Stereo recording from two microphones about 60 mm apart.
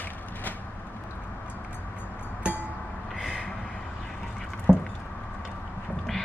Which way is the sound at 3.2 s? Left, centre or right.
Centre.